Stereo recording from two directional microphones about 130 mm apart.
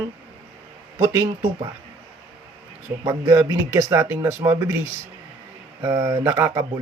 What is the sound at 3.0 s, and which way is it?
Speech, 25° right (ahead or behind).